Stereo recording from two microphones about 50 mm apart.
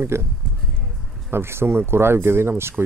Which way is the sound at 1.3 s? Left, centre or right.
Right.